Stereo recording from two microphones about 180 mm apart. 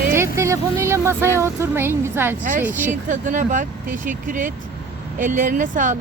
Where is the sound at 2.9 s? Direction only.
45° right (ahead or behind).